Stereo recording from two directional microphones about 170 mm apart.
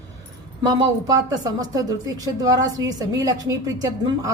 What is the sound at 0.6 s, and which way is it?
Speech, 25° right (ahead or behind).